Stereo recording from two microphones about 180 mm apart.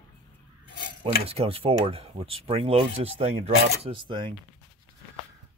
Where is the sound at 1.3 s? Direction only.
30° right (ahead or behind).